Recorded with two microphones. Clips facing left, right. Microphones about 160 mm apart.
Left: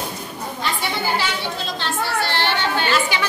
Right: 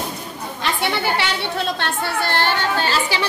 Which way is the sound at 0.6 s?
70° right (ahead or behind).